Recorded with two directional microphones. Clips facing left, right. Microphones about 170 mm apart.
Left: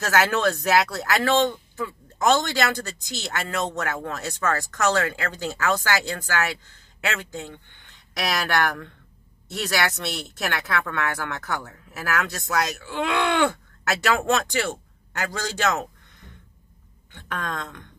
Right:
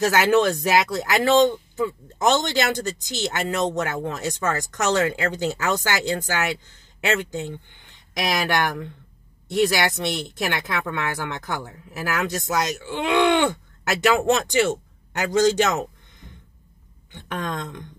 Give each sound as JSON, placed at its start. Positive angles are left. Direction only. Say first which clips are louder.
{"t": 0.0, "sound": "speech", "louder": "right 4 dB", "side_deg": -20}
{"t": 17.1, "sound": "speech", "louder": "right 2 dB", "side_deg": -15}